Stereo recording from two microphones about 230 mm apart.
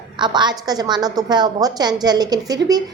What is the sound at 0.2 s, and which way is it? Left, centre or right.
A woman's voice, centre.